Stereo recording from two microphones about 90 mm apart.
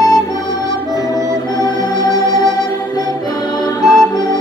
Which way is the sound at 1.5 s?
50° left (ahead or behind).